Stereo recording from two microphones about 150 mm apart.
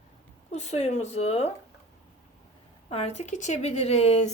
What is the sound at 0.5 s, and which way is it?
Speech, 45° left (ahead or behind).